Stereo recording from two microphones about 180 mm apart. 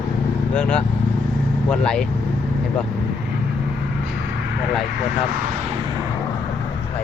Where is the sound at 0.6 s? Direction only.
5° left (ahead or behind).